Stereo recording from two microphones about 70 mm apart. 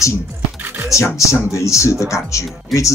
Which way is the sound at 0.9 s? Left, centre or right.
Left.